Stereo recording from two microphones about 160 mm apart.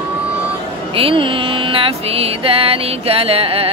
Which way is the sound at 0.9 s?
35° right (ahead or behind).